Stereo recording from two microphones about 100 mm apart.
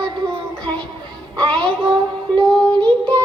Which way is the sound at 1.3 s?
10° left (ahead or behind).